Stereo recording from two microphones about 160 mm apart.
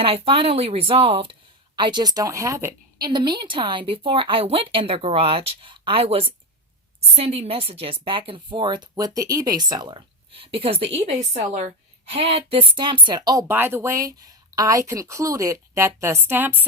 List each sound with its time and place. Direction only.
0.0 s speech: 35° right (ahead or behind)
13.5 s a woman's voice: 15° right (ahead or behind)